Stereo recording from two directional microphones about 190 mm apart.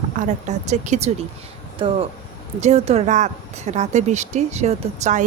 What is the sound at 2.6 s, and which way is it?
Speech, 35° right (ahead or behind).